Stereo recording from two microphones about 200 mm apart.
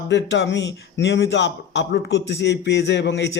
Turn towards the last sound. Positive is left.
turn(degrees=60)  # may be behind; listen again after turning